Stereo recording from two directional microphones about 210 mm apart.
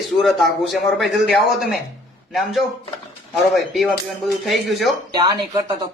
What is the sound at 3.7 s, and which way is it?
A man's voice, centre (ahead or behind).